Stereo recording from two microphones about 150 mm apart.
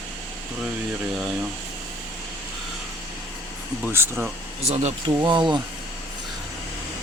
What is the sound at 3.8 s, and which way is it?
Speech, 15° right (ahead or behind).